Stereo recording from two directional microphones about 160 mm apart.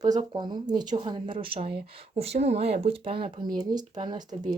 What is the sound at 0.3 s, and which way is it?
Speech, 25° right (ahead or behind).